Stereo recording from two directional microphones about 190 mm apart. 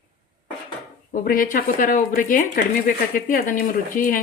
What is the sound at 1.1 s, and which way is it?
A woman's voice, 50° left (ahead or behind).